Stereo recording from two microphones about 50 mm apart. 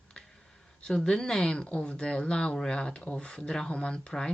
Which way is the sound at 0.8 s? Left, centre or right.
Centre.